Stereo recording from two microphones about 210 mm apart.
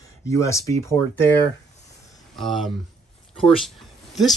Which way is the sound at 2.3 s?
Centre (ahead or behind).